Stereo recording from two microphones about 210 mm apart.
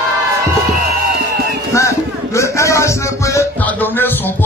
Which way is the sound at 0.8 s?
50° right (ahead or behind).